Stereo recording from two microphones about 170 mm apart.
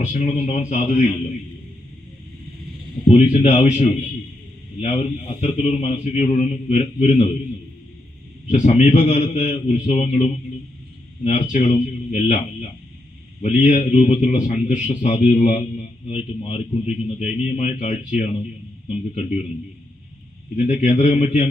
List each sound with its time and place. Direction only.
0.0 s a man's voice: 40° left (ahead or behind)
3.1 s a man's voice: 40° left (ahead or behind)
8.4 s a man's voice: 45° left (ahead or behind)
13.4 s a man's voice: 45° left (ahead or behind)
20.6 s a man's voice: 45° left (ahead or behind)